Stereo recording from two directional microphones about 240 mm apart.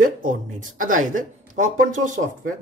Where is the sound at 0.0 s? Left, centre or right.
Right.